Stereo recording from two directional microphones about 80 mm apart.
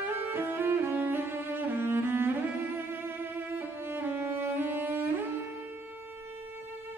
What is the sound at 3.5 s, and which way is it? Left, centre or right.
Music, right.